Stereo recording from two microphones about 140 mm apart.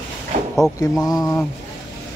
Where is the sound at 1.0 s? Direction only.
25° left (ahead or behind).